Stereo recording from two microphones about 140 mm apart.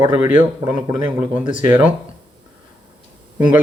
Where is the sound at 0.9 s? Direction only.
30° right (ahead or behind).